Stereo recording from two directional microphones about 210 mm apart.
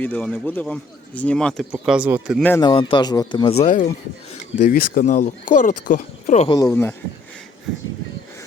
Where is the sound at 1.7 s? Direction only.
5° right (ahead or behind).